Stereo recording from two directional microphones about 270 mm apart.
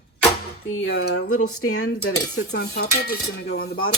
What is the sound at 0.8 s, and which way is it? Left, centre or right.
Speech, left.